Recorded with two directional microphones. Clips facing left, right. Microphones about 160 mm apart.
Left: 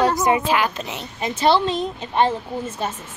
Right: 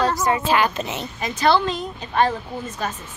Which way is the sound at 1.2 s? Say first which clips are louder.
Left 1 dB; 25° left (ahead or behind).